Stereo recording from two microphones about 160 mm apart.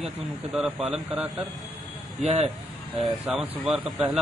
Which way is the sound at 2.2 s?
40° right (ahead or behind).